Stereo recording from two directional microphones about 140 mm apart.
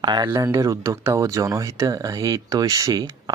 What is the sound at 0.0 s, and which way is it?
Speech, 35° right (ahead or behind).